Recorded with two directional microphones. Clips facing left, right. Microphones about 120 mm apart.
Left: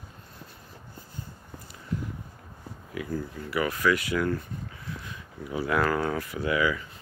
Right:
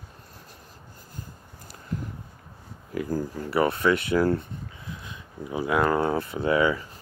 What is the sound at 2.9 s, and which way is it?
Speech, 40° right (ahead or behind).